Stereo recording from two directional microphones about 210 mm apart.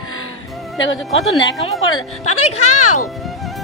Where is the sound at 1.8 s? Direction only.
90° left.